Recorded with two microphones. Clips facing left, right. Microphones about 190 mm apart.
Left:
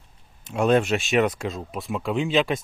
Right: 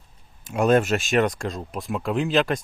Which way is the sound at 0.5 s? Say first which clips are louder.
Right 1 dB; centre (ahead or behind).